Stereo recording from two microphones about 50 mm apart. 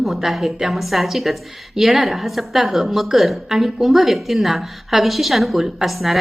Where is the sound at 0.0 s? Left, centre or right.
Centre.